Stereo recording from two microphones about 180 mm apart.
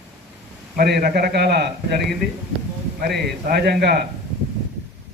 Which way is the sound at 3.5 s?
65° right (ahead or behind).